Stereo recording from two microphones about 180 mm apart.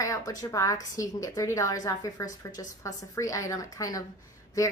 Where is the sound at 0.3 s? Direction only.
15° left (ahead or behind).